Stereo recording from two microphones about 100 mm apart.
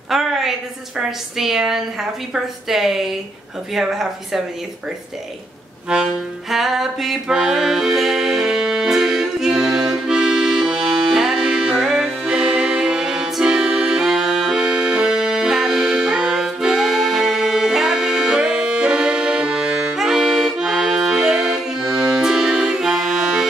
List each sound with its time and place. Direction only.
0.1 s a woman's voice: 5° right (ahead or behind)
5.9 s music: 5° right (ahead or behind)